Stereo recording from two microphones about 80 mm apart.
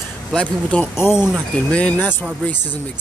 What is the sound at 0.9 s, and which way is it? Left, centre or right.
Speech, left.